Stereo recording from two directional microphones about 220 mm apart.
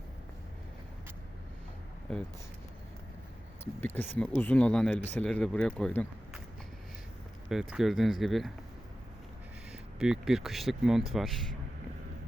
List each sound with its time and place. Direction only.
3.6 s speech: 10° left (ahead or behind)
7.5 s speech: centre (ahead or behind)
10.0 s speech: centre (ahead or behind)